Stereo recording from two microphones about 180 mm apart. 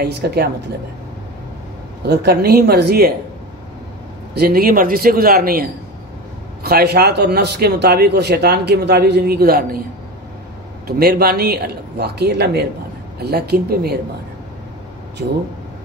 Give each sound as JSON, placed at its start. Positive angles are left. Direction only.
{"t": 0.0, "sound": "a man's voice", "side_deg": -60}
{"t": 2.0, "sound": "a man's voice", "side_deg": -60}
{"t": 4.3, "sound": "a man's voice", "side_deg": -60}
{"t": 10.9, "sound": "a man's voice", "side_deg": -60}